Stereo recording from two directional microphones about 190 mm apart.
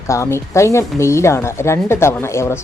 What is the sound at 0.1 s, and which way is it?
Speech, 15° left (ahead or behind).